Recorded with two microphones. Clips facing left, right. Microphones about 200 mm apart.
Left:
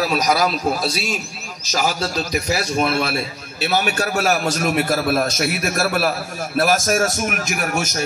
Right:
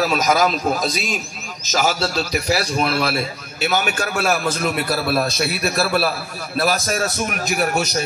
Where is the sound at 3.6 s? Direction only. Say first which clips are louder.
Left 1 dB; 35° left (ahead or behind).